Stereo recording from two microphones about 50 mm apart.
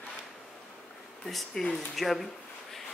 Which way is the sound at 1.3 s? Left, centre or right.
Centre.